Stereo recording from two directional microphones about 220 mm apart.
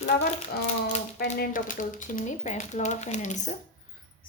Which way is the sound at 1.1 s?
45° left (ahead or behind).